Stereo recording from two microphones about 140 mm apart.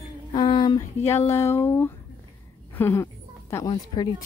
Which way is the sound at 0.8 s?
20° left (ahead or behind).